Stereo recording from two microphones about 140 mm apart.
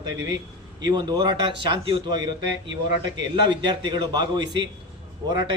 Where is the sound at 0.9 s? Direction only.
30° right (ahead or behind).